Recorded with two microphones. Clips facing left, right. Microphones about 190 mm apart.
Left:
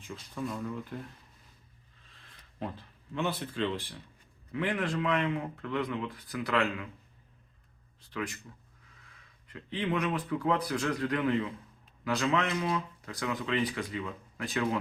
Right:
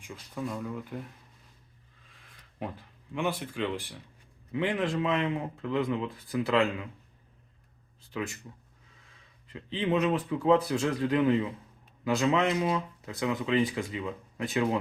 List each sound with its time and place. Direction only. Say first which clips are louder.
0.4 s speech: right 1 dB; 5° right (ahead or behind)
2.6 s speech: right 1 dB; 15° right (ahead or behind)
8.1 s speech: right 2 dB; 20° right (ahead or behind)
9.5 s speech: right 4 dB; 25° right (ahead or behind)